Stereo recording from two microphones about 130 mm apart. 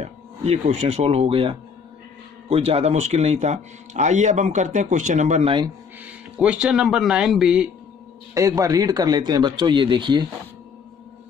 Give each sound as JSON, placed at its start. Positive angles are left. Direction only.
{"t": 0.0, "sound": "speech", "side_deg": -55}
{"t": 6.0, "sound": "speech", "side_deg": -10}
{"t": 8.4, "sound": "speech", "side_deg": -25}